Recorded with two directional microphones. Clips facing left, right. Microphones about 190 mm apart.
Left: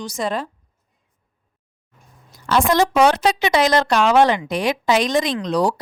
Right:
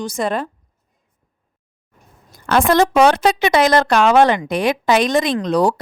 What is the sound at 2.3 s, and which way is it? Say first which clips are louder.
Speech: right 3 dB; 55° right (ahead or behind).